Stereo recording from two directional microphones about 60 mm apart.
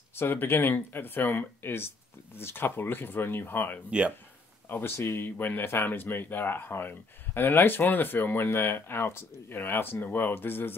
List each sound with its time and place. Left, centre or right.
0.1 s speech: left